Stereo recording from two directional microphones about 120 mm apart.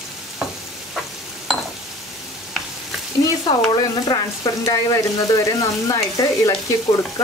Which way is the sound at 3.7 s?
35° left (ahead or behind).